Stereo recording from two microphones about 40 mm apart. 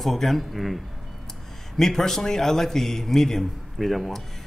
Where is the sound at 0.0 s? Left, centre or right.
Centre.